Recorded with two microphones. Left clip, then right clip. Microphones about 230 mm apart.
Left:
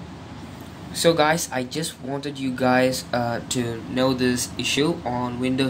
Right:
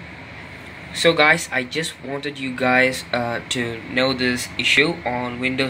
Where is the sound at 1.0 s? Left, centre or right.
Centre.